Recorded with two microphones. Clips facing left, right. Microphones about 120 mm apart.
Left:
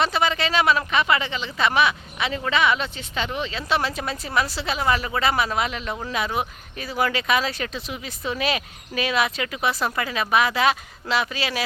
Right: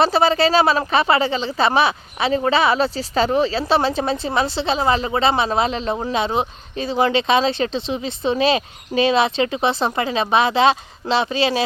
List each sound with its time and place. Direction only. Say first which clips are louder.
0.0 s speech: right 7 dB; 35° right (ahead or behind)